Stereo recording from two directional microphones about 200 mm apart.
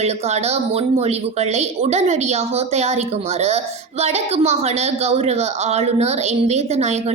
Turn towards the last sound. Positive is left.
turn(degrees=-35)  # may be behind; listen again after turning